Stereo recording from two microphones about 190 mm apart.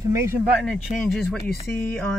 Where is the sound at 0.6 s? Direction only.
Centre (ahead or behind).